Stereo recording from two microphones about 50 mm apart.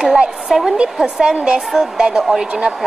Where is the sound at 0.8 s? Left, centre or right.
Centre.